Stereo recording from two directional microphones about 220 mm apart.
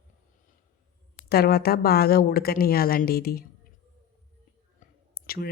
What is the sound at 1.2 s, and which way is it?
Speech, 45° left (ahead or behind).